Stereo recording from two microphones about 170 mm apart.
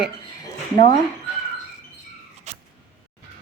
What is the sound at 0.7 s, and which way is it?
Speech, 25° left (ahead or behind).